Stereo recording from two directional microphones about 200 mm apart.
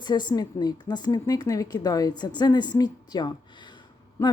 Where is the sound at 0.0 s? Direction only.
20° left (ahead or behind).